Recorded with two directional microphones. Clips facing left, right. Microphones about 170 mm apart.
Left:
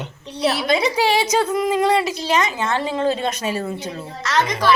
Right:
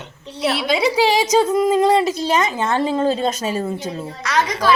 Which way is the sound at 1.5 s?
25° right (ahead or behind).